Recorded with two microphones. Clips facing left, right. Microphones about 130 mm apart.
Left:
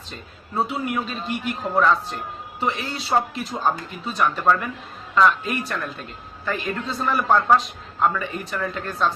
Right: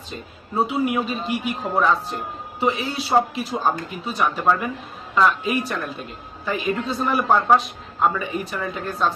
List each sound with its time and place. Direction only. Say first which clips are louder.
0.1 s speech: right 3 dB; 5° right (ahead or behind)